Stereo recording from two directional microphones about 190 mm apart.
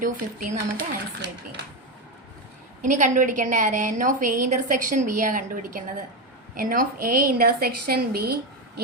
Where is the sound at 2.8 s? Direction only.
40° right (ahead or behind).